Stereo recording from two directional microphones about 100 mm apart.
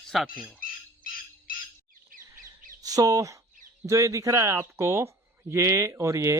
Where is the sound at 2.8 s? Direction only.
35° right (ahead or behind).